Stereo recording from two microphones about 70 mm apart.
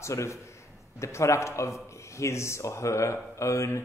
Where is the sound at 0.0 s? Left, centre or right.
Left.